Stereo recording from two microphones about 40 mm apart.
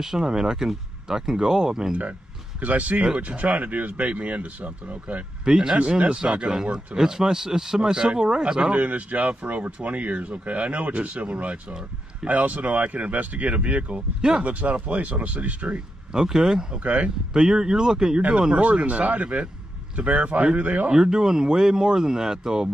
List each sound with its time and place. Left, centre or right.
0.0 s speech: centre
2.6 s speech: right
5.4 s speech: centre
5.8 s speech: right
8.5 s speech: right
16.1 s speech: centre
16.8 s speech: right
17.3 s speech: centre
18.5 s speech: right
20.9 s speech: centre